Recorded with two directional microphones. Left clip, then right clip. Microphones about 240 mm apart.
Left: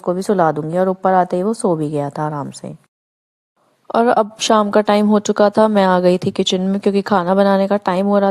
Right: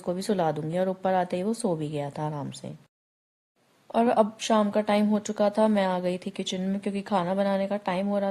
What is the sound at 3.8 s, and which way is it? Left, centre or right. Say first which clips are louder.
A woman's voice: left 9 dB; left.